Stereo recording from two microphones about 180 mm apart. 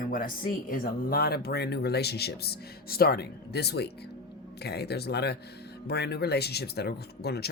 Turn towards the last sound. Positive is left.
turn(degrees=65)  # may be behind; listen again after turning